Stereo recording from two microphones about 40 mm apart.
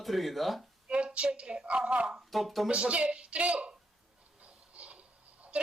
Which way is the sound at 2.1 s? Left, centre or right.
Centre.